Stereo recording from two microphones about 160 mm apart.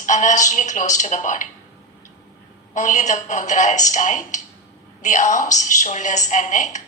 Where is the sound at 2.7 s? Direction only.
50° left (ahead or behind).